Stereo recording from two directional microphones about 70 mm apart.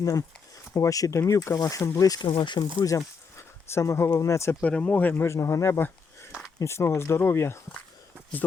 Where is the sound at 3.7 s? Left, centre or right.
Left.